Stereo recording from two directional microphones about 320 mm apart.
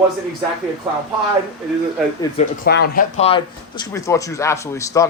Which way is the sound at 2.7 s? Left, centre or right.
Left.